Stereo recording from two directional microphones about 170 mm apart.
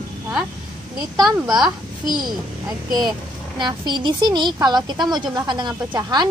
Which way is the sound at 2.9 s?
25° right (ahead or behind).